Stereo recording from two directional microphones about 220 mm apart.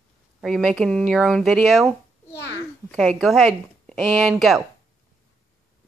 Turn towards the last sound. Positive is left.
turn(degrees=0)  # may be behind; listen again after turning